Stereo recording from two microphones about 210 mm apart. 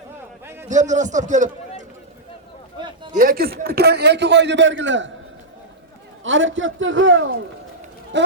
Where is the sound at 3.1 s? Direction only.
40° right (ahead or behind); by 5.1 s 60° right (ahead or behind).